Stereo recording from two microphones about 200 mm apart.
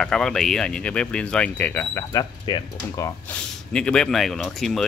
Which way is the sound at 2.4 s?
25° left (ahead or behind).